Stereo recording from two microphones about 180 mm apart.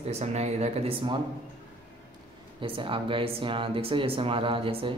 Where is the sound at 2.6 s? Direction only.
30° right (ahead or behind).